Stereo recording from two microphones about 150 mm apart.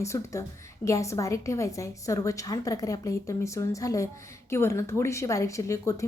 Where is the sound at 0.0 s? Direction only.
20° left (ahead or behind).